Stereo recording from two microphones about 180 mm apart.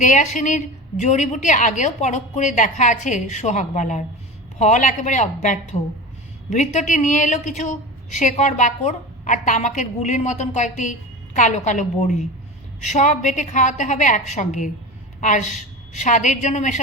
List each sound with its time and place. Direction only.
0.0 s a woman's voice: 45° left (ahead or behind)